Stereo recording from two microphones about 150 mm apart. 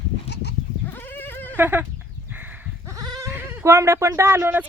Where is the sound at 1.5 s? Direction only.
15° right (ahead or behind).